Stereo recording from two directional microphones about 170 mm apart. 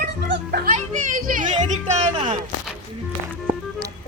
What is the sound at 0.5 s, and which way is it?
Speech, 60° right (ahead or behind).